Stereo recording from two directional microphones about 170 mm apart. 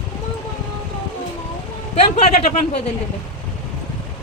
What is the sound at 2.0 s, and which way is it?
Speech, 40° left (ahead or behind).